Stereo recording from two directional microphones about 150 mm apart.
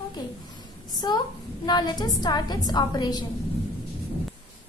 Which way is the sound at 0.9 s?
25° left (ahead or behind).